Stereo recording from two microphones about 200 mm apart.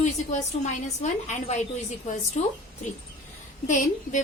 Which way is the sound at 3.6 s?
40° left (ahead or behind).